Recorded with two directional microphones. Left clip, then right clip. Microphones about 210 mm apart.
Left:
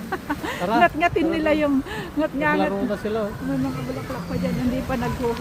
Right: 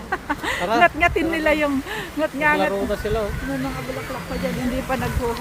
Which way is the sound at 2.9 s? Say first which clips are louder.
Right 2 dB; 35° right (ahead or behind).